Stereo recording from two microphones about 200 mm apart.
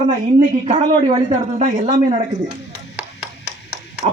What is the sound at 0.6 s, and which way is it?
A man's voice, 30° right (ahead or behind).